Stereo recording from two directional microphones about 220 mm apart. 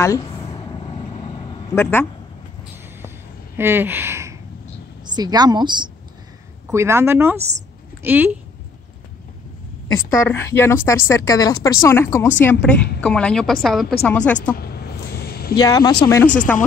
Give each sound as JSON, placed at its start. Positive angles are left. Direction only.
{"t": 0.0, "sound": "speech", "side_deg": 15}
{"t": 1.7, "sound": "speech", "side_deg": 10}
{"t": 3.5, "sound": "a woman's voice", "side_deg": -10}
{"t": 10.2, "sound": "a woman's voice", "side_deg": 10}
{"t": 14.6, "sound": "vehicle", "side_deg": 45}
{"t": 15.5, "sound": "speech", "side_deg": 15}